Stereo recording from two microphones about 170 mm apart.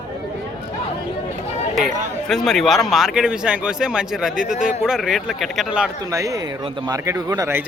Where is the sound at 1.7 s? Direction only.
Centre (ahead or behind).